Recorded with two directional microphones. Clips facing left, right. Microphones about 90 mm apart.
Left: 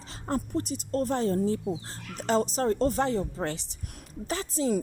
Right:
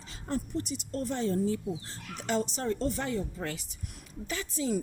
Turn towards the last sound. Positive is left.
turn(degrees=40)  # may be behind; listen again after turning